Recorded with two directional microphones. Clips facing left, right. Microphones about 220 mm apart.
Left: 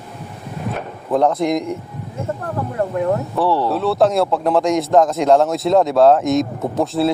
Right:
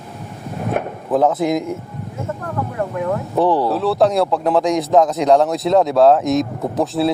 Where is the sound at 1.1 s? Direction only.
5° right (ahead or behind).